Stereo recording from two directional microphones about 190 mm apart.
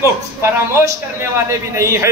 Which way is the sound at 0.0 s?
15° right (ahead or behind).